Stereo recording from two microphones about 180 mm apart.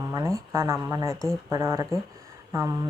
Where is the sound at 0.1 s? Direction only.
20° right (ahead or behind).